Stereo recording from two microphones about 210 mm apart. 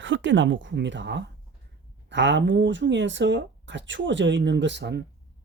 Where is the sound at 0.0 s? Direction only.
60° right (ahead or behind).